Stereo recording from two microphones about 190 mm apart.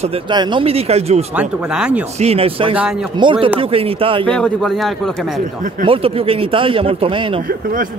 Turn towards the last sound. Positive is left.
turn(degrees=-30)  # may be behind; listen again after turning